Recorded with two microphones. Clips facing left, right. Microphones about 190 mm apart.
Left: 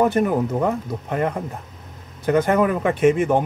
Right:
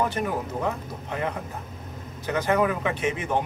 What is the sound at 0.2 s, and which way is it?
Speech, 55° left (ahead or behind).